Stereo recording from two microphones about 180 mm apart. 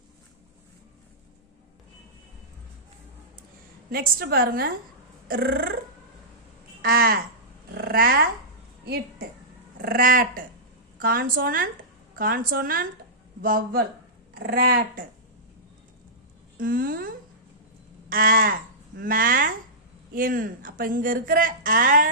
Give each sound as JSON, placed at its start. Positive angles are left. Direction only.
{"t": 3.8, "sound": "a woman's voice", "side_deg": -55}
{"t": 6.8, "sound": "a woman's voice", "side_deg": -55}
{"t": 9.7, "sound": "a woman's voice", "side_deg": -50}
{"t": 16.6, "sound": "a woman's voice", "side_deg": -50}